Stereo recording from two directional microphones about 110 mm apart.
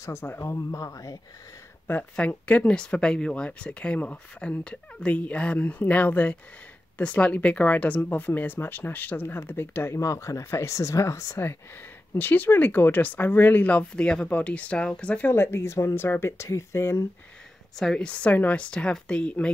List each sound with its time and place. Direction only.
0.0 s speech: 20° left (ahead or behind)
1.9 s speech: 15° left (ahead or behind)
17.7 s speech: 10° left (ahead or behind)